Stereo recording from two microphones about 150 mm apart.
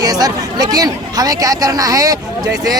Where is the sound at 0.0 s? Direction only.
25° right (ahead or behind).